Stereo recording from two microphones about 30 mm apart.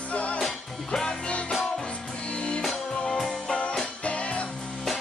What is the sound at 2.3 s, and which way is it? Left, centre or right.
Music, left.